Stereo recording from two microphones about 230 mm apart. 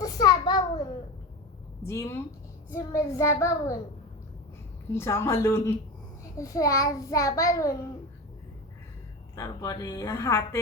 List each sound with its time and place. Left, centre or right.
0.0 s child singing: centre
1.8 s a child's voice: centre
4.9 s a child's voice: centre
9.3 s a child's voice: centre